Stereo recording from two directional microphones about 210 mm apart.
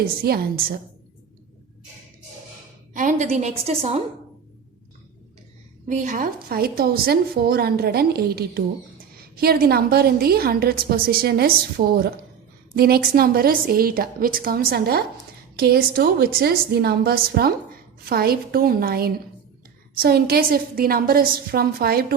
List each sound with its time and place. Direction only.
2.9 s a woman's voice: 40° right (ahead or behind)
5.9 s a woman's voice: 40° right (ahead or behind)